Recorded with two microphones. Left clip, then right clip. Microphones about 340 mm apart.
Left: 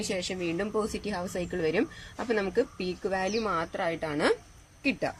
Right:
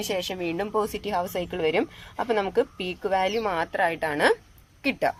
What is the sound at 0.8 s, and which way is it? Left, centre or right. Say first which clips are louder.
Speech: right 6 dB; right.